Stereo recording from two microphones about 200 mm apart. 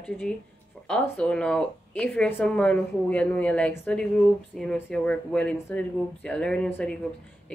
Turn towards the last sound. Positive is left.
turn(degrees=5)  # may be behind; listen again after turning